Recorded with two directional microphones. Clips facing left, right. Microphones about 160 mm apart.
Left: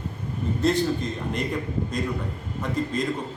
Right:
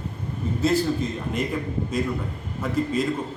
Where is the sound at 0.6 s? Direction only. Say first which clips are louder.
Right 1 dB; 5° right (ahead or behind).